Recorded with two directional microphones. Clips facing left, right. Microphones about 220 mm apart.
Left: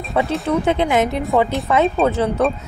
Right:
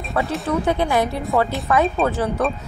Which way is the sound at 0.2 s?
20° left (ahead or behind).